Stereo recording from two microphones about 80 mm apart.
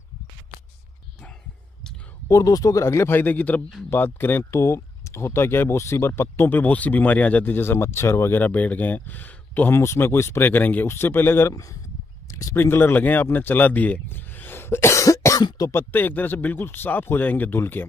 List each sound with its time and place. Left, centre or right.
2.2 s a man's voice: left
4.5 s speech: left
8.4 s speech: centre
9.8 s speech: left
12.3 s a sound: left
12.5 s speech: left
15.4 s speech: left
15.7 s speech: left